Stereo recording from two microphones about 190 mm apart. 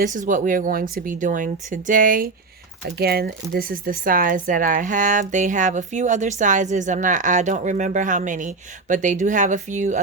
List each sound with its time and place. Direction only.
0.0 s speech: 45° right (ahead or behind)